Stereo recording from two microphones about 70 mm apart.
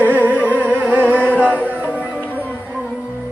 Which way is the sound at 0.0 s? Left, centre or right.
Right.